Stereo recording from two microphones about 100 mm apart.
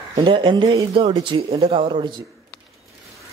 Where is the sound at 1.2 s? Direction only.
60° right (ahead or behind).